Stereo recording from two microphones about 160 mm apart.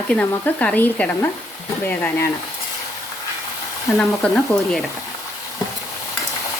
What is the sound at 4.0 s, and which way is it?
Speech, 5° left (ahead or behind).